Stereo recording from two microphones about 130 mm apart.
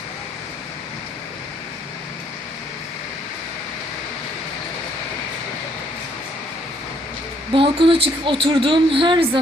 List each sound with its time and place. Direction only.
7.5 s a woman's voice: 45° right (ahead or behind)